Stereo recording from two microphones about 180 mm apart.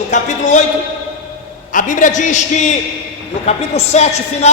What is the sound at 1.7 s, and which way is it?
A man's voice, 45° left (ahead or behind).